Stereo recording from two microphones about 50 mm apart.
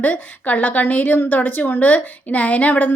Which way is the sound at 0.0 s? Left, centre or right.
Left.